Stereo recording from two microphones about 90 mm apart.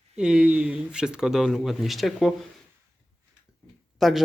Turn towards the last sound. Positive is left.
turn(degrees=0)  # may be behind; listen again after turning